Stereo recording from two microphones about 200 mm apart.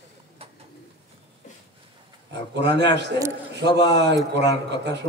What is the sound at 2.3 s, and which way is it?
Speech, 60° right (ahead or behind).